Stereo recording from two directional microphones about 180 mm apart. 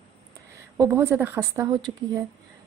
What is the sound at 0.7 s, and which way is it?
Speech, 15° right (ahead or behind).